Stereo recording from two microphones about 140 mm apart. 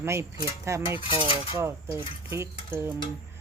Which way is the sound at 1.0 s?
40° left (ahead or behind).